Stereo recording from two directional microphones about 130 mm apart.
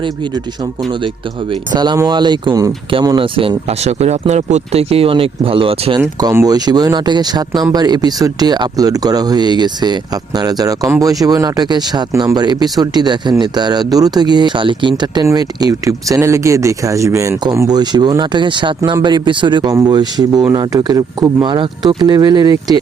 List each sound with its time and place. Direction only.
1.7 s speech: 35° right (ahead or behind)
3.3 s speech: 50° right (ahead or behind)
6.3 s speech: 30° right (ahead or behind)